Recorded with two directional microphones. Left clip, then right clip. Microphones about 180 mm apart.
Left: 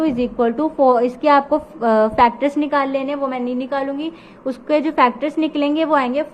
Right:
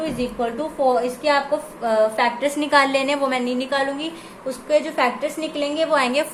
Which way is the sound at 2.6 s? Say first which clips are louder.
Right 5 dB; 10° left (ahead or behind).